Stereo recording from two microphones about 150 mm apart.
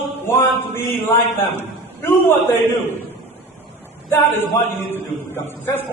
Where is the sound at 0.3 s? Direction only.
15° left (ahead or behind).